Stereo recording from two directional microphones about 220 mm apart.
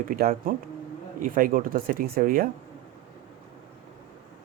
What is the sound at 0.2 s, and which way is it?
Speech, 40° right (ahead or behind).